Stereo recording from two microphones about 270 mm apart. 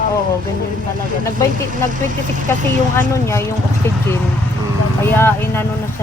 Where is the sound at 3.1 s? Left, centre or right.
Centre.